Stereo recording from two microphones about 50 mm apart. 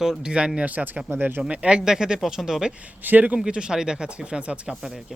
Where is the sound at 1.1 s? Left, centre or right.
Right.